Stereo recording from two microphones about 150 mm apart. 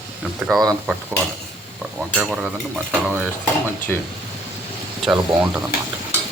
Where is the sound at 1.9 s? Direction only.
5° right (ahead or behind).